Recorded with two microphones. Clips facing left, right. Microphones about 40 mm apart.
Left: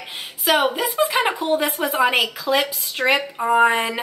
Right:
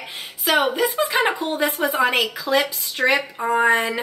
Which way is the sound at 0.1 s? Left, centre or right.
Centre.